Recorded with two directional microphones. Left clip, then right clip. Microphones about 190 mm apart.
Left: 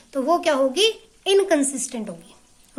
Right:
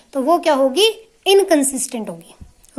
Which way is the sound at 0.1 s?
20° right (ahead or behind).